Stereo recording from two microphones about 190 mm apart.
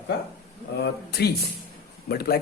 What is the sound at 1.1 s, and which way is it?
Speech, 55° left (ahead or behind).